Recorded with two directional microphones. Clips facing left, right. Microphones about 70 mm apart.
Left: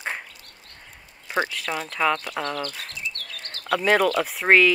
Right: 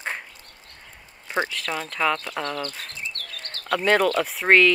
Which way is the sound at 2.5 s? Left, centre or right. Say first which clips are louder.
Even; right.